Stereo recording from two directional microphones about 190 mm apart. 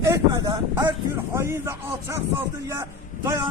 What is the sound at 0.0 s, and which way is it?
Speech, 15° right (ahead or behind).